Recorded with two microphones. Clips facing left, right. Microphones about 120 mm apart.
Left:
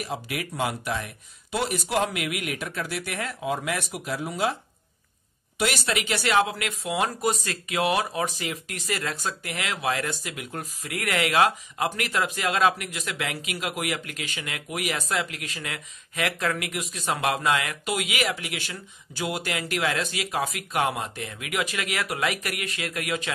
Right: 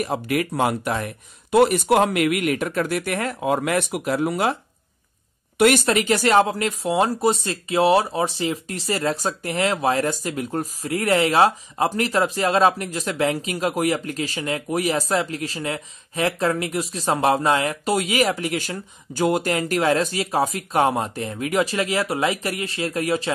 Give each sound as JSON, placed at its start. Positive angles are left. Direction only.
{"t": 0.0, "sound": "speech", "side_deg": -50}
{"t": 5.6, "sound": "speech", "side_deg": -50}